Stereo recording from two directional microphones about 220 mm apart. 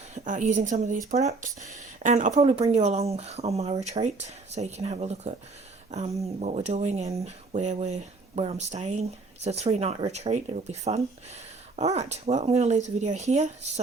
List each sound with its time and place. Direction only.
0.1 s speech: 35° right (ahead or behind)
6.4 s speech: 30° right (ahead or behind)